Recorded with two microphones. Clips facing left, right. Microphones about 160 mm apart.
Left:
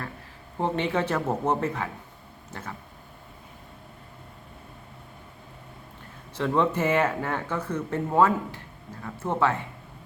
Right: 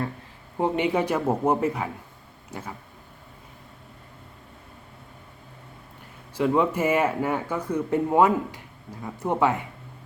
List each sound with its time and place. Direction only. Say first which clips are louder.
0.6 s speech: right 3 dB; 10° right (ahead or behind)
6.3 s speech: right 2 dB; 10° right (ahead or behind)